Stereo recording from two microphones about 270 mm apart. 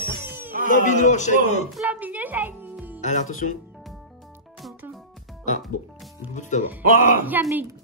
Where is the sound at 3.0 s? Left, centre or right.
Left.